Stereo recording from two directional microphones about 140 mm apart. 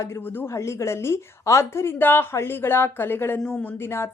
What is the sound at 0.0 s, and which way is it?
A woman's voice, 15° left (ahead or behind).